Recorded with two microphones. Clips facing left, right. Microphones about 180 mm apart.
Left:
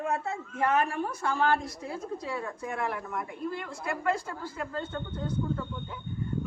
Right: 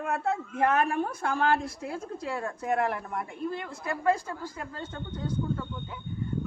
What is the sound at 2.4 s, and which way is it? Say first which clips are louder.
Speech: right 6 dB; 45° right (ahead or behind).